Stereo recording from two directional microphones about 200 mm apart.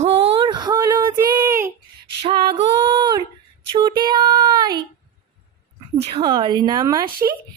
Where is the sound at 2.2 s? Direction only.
25° right (ahead or behind).